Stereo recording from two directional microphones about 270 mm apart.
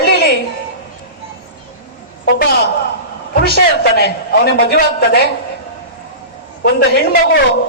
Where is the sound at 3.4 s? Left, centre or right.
Left.